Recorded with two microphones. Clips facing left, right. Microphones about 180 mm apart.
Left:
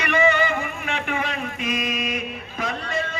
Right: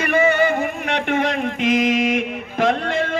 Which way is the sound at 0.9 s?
70° right (ahead or behind).